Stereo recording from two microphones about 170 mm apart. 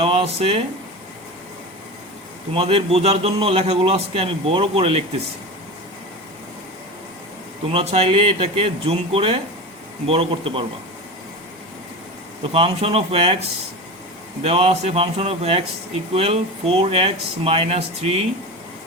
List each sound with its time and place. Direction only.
0.0 s speech: 35° right (ahead or behind)
2.5 s a man's voice: 35° right (ahead or behind)
7.7 s a man's voice: 35° right (ahead or behind)
12.4 s a man's voice: 35° right (ahead or behind)
14.4 s a man's voice: 35° right (ahead or behind)